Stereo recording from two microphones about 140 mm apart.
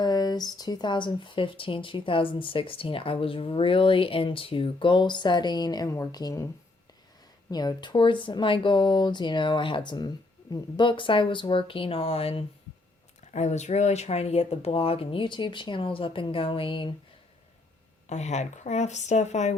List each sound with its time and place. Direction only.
0.0 s speech: 30° left (ahead or behind)
7.5 s speech: 30° left (ahead or behind)
13.3 s speech: 55° left (ahead or behind); by 16.9 s 35° left (ahead or behind)
18.1 s a woman's voice: 55° left (ahead or behind)